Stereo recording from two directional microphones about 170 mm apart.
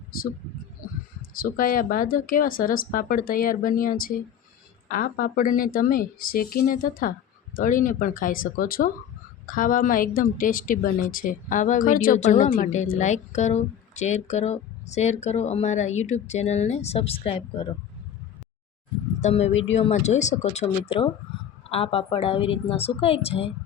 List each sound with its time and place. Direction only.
1.2 s a woman's voice: 55° left (ahead or behind)
12.2 s a woman's voice: 45° left (ahead or behind)
19.2 s a woman's voice: 40° left (ahead or behind)